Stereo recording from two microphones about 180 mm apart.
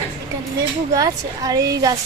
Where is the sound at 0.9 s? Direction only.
20° right (ahead or behind).